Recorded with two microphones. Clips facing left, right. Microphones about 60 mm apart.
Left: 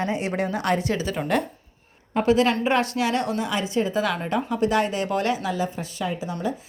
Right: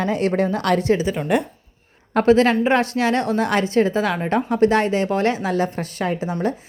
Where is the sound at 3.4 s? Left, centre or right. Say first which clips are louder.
Right 6 dB; right.